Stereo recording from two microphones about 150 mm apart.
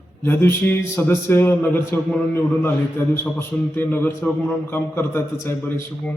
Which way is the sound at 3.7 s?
15° left (ahead or behind).